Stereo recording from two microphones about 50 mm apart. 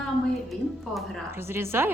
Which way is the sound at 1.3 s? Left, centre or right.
Right.